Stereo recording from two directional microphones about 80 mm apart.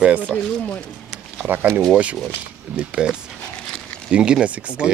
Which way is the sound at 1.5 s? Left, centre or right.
Right.